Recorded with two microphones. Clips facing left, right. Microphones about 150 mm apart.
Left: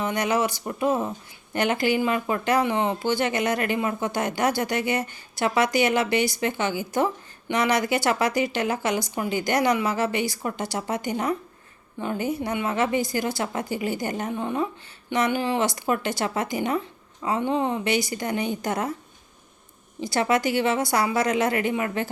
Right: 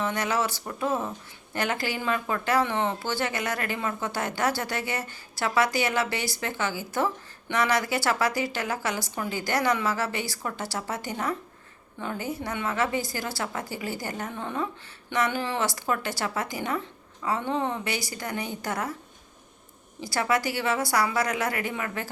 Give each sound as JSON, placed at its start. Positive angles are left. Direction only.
{"t": 0.0, "sound": "speech", "side_deg": 15}
{"t": 20.0, "sound": "speech", "side_deg": 20}